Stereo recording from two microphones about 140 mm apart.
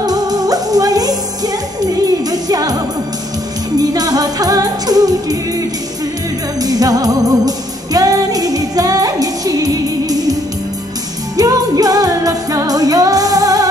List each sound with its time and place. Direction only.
0.0 s music: 25° right (ahead or behind)
3.7 s music: 25° right (ahead or behind)
11.3 s music: 25° right (ahead or behind)